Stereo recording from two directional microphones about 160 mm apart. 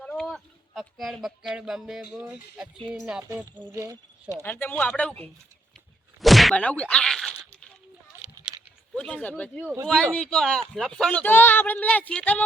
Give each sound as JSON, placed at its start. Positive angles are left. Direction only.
{"t": 0.0, "sound": "a sound", "side_deg": 5}
{"t": 2.2, "sound": "speech", "side_deg": -5}
{"t": 3.2, "sound": "speech", "side_deg": -20}
{"t": 4.4, "sound": "speech", "side_deg": 10}
{"t": 6.1, "sound": "whack", "side_deg": 0}
{"t": 9.0, "sound": "speech", "side_deg": 5}